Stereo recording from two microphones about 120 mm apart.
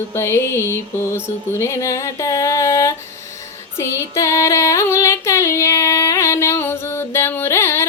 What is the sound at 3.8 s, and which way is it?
Female singing, 25° left (ahead or behind).